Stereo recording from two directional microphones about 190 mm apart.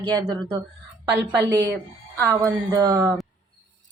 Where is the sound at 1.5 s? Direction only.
15° right (ahead or behind).